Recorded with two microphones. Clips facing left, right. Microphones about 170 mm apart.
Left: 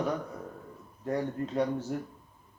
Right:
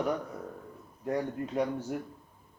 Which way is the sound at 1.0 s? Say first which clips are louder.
Left 1 dB; 10° right (ahead or behind).